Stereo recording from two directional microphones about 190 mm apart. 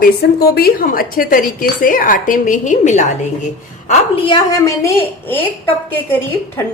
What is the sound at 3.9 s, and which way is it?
Speech, 30° left (ahead or behind).